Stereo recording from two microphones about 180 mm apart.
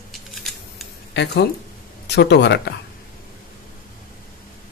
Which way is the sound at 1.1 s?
70° left (ahead or behind).